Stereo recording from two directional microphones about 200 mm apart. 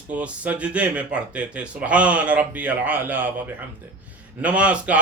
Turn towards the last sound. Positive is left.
turn(degrees=-5)  # may be behind; listen again after turning